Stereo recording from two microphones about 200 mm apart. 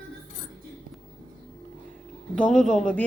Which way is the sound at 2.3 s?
Centre (ahead or behind).